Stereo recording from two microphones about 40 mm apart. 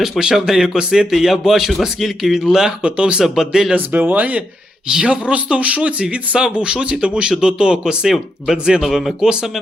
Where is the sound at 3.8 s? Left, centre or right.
Right.